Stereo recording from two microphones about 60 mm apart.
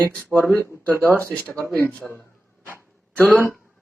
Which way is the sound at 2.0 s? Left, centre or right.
Centre.